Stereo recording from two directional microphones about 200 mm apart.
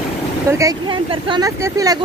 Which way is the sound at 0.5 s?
15° right (ahead or behind).